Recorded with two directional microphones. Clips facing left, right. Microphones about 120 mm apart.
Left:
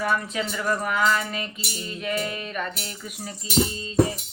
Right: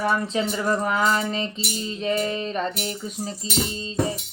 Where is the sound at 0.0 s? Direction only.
25° right (ahead or behind).